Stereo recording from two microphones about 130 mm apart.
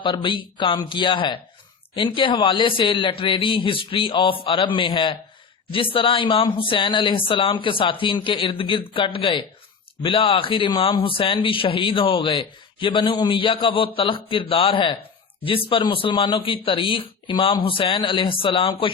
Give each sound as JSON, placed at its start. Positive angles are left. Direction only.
{"t": 0.0, "sound": "a man's voice", "side_deg": 40}